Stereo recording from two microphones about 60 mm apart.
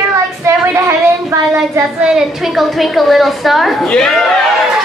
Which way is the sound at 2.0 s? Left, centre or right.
Centre.